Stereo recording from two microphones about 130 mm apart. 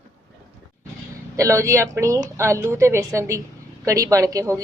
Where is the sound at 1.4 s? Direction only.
25° right (ahead or behind).